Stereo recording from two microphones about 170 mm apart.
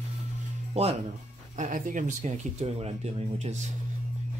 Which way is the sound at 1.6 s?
50° right (ahead or behind).